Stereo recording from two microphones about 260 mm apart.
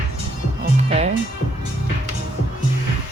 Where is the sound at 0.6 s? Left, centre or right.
Right.